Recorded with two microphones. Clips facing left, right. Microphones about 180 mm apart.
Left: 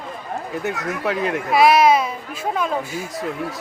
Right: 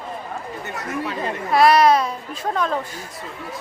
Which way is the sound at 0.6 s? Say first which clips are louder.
Left 4 dB; 90° left.